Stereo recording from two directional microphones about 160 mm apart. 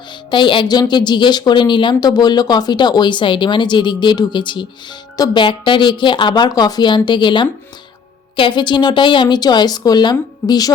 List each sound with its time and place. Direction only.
0.3 s a woman's voice: 30° left (ahead or behind)